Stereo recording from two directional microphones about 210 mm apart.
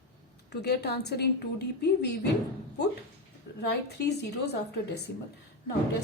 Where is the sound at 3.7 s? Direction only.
50° left (ahead or behind).